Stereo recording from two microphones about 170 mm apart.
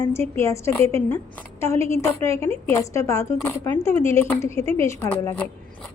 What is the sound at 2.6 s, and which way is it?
A woman's voice, 15° left (ahead or behind).